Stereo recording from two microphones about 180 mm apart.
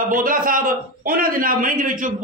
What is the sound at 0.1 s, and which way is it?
A man's voice, 50° right (ahead or behind).